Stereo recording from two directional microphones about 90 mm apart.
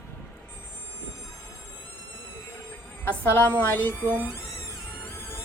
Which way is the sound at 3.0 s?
20° left (ahead or behind).